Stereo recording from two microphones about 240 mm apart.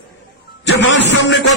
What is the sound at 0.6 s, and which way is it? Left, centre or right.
Speech, left.